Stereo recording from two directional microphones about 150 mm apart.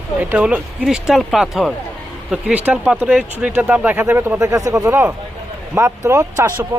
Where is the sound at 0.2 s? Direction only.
10° right (ahead or behind).